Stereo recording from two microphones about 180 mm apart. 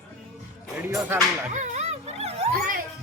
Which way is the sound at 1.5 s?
40° right (ahead or behind).